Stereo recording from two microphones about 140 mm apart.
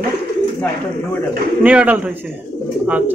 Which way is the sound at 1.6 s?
10° right (ahead or behind).